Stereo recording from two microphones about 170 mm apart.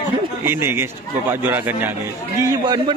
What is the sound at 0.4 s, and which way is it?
Speech, 15° right (ahead or behind).